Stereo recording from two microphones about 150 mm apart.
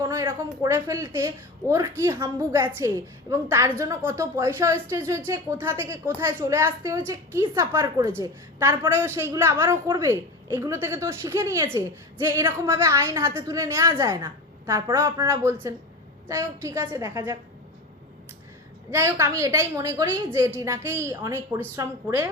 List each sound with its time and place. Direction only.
0.0 s a woman's voice: 20° right (ahead or behind)
18.9 s a woman's voice: 15° right (ahead or behind)